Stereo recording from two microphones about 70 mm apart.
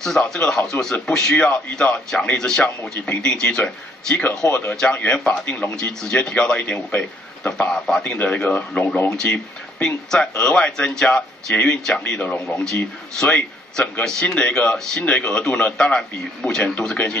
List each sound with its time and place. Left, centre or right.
0.0 s speech: centre
8.0 s speech: centre
9.1 s speech: centre
12.0 s a man's voice: left